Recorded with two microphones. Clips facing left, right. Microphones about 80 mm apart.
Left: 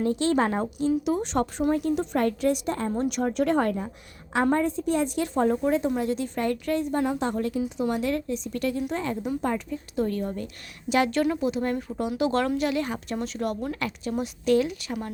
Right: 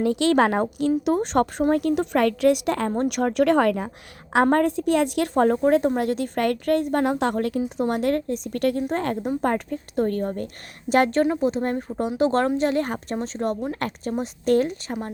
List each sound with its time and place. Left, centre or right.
0.0 s a woman's voice: right
3.0 s a woman's voice: right
4.5 s a woman's voice: right
13.1 s speech: right
13.7 s a woman's voice: right